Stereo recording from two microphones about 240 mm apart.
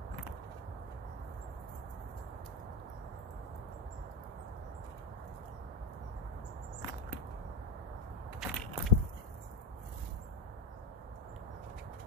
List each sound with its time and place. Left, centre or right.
8.4 s crushing: centre